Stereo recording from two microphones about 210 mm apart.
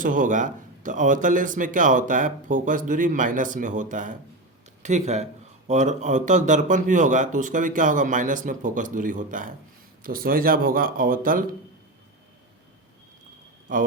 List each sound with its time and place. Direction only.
0.0 s speech: 40° right (ahead or behind)
13.7 s speech: 40° right (ahead or behind)